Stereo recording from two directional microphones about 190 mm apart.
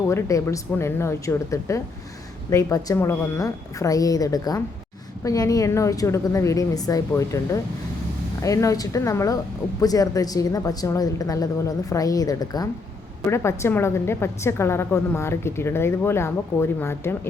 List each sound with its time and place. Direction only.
0.1 s a woman's voice: 15° left (ahead or behind)